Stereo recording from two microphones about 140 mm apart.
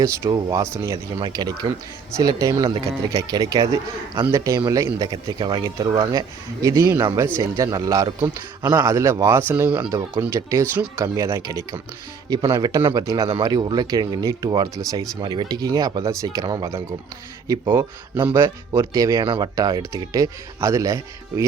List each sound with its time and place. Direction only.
0.0 s speech: 25° right (ahead or behind)
1.1 s speech: 30° right (ahead or behind)
13.3 s speech: 35° right (ahead or behind)
19.2 s speech: 40° right (ahead or behind)
19.5 s speech: 25° right (ahead or behind)